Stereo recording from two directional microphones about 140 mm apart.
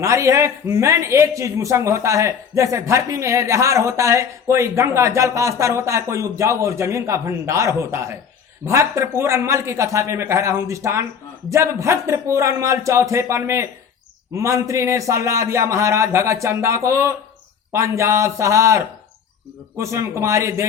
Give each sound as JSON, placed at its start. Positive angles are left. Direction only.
{"t": 0.0, "sound": "a man's voice", "side_deg": -20}